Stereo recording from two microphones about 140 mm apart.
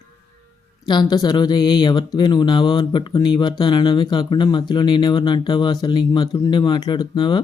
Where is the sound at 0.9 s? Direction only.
30° left (ahead or behind).